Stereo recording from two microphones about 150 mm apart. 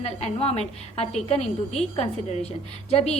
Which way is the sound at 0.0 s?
45° left (ahead or behind).